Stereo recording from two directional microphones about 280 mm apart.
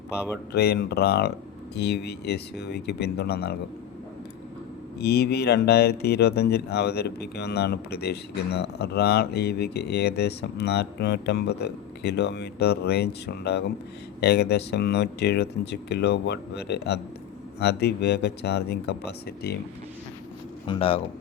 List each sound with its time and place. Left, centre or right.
0.5 s speech: left
4.9 s speech: left
20.7 s speech: centre